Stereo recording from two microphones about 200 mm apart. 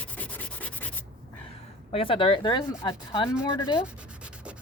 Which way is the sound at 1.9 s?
25° left (ahead or behind).